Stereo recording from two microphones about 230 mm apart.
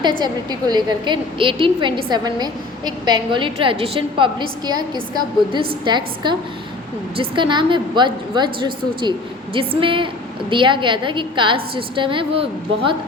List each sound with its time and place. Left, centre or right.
0.0 s a woman's voice: centre